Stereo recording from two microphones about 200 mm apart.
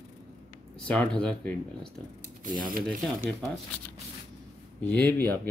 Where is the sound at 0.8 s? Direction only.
5° left (ahead or behind).